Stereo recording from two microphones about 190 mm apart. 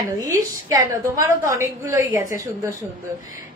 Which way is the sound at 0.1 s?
20° right (ahead or behind).